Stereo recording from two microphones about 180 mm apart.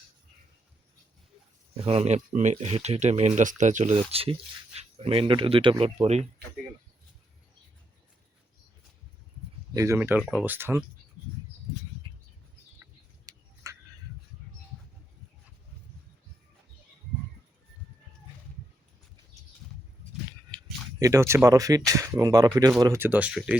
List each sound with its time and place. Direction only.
1.7 s speech: 35° right (ahead or behind)
9.7 s speech: 15° right (ahead or behind)
12.8 s a sound: 15° right (ahead or behind)
21.0 s speech: 15° right (ahead or behind)